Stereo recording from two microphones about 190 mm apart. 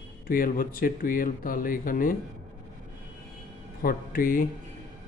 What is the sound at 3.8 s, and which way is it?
Speech, 50° left (ahead or behind).